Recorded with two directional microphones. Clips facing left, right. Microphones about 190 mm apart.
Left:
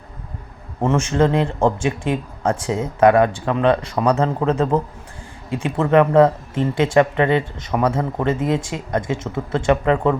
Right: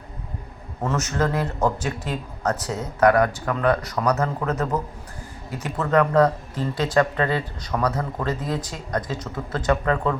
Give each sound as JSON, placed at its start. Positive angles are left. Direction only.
{"t": 0.8, "sound": "speech", "side_deg": 25}